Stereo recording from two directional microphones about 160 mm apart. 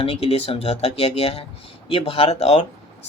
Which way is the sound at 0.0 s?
40° left (ahead or behind).